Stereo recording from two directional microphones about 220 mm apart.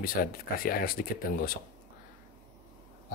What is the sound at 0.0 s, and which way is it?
Speech, 40° left (ahead or behind).